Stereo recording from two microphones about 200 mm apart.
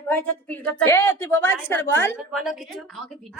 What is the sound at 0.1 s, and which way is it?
A woman's voice, 10° left (ahead or behind).